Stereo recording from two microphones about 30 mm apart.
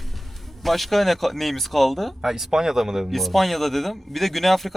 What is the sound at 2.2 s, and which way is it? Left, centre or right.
Speech, centre.